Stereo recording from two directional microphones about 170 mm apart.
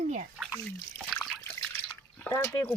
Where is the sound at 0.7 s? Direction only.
10° left (ahead or behind).